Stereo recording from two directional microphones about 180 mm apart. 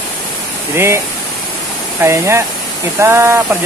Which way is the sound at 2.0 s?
15° right (ahead or behind).